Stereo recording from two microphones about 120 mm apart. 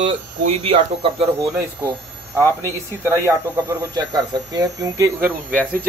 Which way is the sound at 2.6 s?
20° right (ahead or behind).